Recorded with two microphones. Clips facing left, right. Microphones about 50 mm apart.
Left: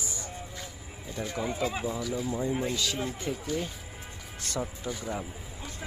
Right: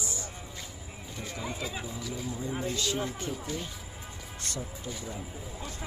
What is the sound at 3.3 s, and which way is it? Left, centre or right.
Speech, left.